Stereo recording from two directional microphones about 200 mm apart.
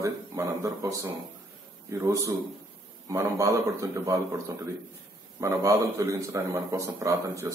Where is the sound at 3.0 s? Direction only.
15° right (ahead or behind).